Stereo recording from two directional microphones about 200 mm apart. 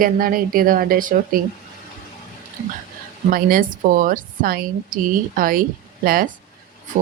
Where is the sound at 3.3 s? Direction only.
45° right (ahead or behind).